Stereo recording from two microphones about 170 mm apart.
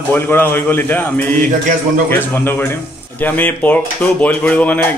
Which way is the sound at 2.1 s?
15° left (ahead or behind).